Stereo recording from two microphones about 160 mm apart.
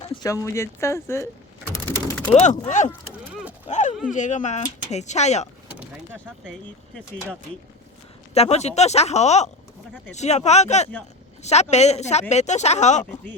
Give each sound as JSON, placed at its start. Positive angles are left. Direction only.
{"t": 0.2, "sound": "speech", "side_deg": 20}
{"t": 2.3, "sound": "speech", "side_deg": 45}
{"t": 6.4, "sound": "speech", "side_deg": 0}
{"t": 8.3, "sound": "speech", "side_deg": 45}